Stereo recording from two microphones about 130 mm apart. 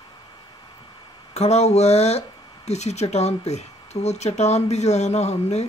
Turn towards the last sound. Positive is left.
turn(degrees=60)  # may be behind; listen again after turning